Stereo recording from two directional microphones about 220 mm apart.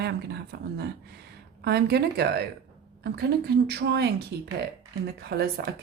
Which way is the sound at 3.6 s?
45° right (ahead or behind).